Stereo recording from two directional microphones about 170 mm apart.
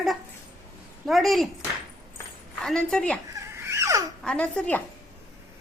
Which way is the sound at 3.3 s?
15° right (ahead or behind).